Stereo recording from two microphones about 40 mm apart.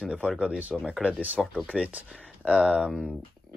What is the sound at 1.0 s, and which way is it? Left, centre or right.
Speech, right.